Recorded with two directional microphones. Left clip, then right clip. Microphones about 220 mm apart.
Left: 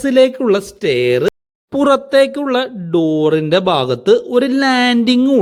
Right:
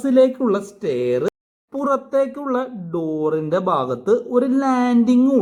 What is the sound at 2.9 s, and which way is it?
Speech, 50° left (ahead or behind).